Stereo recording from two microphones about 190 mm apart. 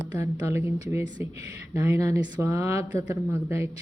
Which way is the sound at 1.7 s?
15° right (ahead or behind).